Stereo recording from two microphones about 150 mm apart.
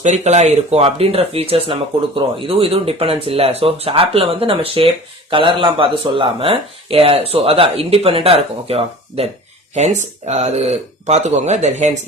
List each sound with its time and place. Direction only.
0.0 s speech: 50° right (ahead or behind)